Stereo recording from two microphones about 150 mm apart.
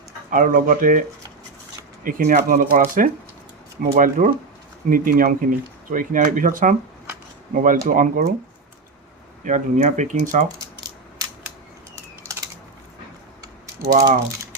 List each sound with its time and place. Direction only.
0.3 s speech: 65° right (ahead or behind)
2.0 s speech: 60° right (ahead or behind)
9.4 s speech: 55° right (ahead or behind)
13.8 s speech: 20° right (ahead or behind)